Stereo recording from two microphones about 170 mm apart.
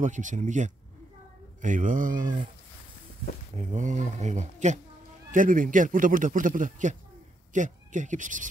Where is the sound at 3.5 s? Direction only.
45° right (ahead or behind).